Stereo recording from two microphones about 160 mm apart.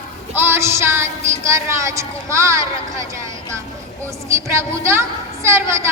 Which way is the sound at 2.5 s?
20° right (ahead or behind).